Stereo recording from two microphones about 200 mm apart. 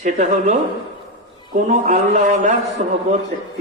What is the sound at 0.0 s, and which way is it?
Speech, 35° right (ahead or behind).